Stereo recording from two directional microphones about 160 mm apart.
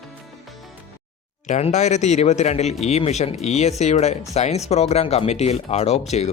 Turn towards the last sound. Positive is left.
turn(degrees=45)  # may be behind; listen again after turning